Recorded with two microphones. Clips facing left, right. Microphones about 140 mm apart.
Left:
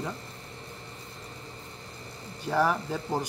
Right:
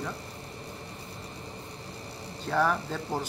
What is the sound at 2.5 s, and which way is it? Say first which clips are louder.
Speech: left 1 dB; 10° left (ahead or behind).